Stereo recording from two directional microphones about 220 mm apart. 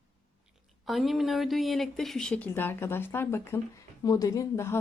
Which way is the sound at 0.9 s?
Centre (ahead or behind).